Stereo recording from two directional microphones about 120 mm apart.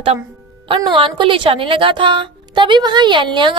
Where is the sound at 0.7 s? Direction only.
45° right (ahead or behind).